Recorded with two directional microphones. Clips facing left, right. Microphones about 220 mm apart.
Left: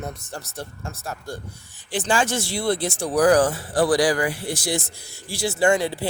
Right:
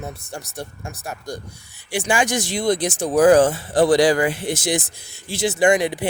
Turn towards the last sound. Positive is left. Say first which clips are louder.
# right 3 dB
turn(degrees=-15)  # may be behind; listen again after turning